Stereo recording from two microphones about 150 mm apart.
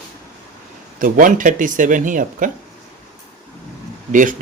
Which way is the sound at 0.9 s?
65° right (ahead or behind).